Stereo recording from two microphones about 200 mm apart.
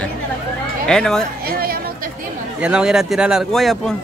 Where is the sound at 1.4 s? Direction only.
50° right (ahead or behind).